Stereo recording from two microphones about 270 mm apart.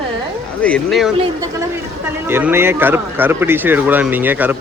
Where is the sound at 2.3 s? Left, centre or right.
Centre.